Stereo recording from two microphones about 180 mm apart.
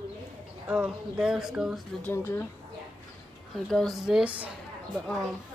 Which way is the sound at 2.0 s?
15° left (ahead or behind).